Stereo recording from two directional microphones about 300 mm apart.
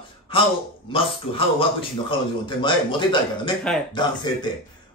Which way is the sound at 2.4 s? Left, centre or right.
Centre.